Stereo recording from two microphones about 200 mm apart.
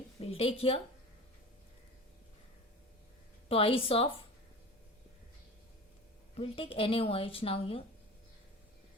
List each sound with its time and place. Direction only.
0.2 s a woman's voice: 30° left (ahead or behind)
3.5 s speech: 30° left (ahead or behind)
6.3 s speech: 30° left (ahead or behind)